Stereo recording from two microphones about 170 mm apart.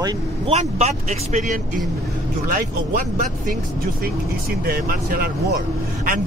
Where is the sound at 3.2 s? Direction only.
55° right (ahead or behind).